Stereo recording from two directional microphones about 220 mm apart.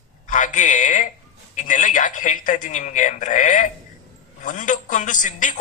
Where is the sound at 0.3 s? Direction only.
35° left (ahead or behind).